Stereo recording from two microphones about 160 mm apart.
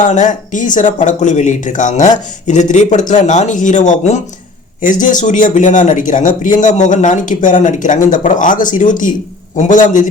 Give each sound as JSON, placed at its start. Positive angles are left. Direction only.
{"t": 0.0, "sound": "speech", "side_deg": 50}